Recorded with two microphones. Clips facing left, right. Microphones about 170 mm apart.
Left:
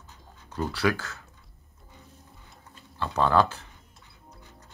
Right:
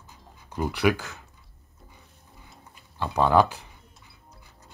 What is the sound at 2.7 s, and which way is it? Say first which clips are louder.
Speech: right 2 dB; 15° right (ahead or behind).